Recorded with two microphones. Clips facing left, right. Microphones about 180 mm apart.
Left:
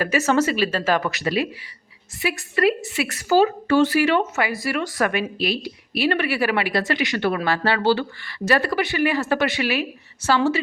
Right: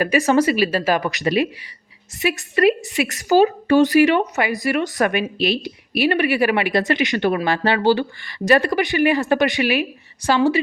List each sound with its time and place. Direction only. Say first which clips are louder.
0.0 s speech: right 3 dB; 15° right (ahead or behind)